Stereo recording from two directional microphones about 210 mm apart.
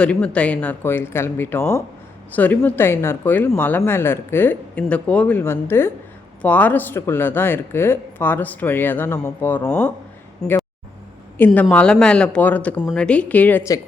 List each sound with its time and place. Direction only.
0.0 s speech: 5° left (ahead or behind)
11.3 s a woman's voice: 10° left (ahead or behind)